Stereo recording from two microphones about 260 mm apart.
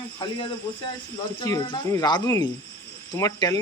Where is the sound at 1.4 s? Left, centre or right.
Centre.